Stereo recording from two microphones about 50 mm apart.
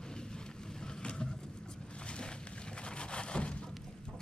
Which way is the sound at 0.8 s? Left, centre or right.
Centre.